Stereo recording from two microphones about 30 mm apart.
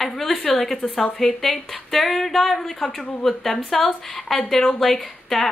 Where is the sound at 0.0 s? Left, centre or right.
Centre.